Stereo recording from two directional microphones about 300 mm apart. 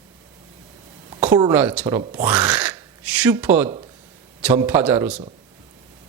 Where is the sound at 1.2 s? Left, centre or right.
Centre.